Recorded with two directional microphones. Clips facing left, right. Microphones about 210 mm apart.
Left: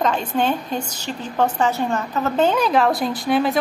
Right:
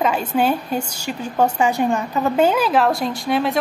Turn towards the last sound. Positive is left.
turn(degrees=0)  # may be behind; listen again after turning